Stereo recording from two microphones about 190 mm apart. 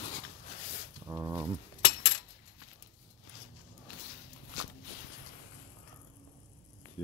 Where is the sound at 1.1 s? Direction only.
20° right (ahead or behind).